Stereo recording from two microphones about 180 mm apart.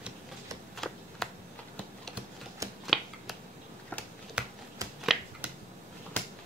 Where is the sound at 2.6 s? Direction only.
20° right (ahead or behind).